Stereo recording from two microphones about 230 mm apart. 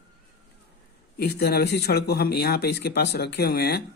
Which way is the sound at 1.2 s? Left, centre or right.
Left.